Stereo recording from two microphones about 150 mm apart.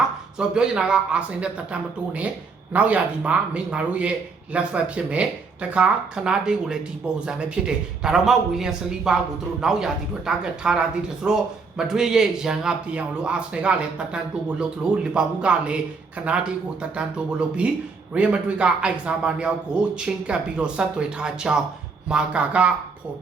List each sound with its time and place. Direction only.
0.3 s speech: 5° right (ahead or behind)